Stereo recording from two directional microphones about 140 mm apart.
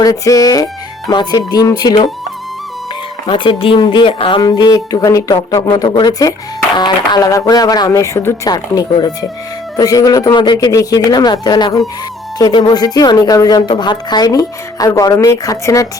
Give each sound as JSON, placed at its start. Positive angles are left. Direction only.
{"t": 0.0, "sound": "a woman's voice", "side_deg": 25}
{"t": 3.2, "sound": "a woman's voice", "side_deg": 35}